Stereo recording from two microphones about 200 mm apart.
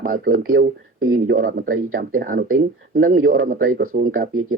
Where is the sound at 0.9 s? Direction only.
90° right.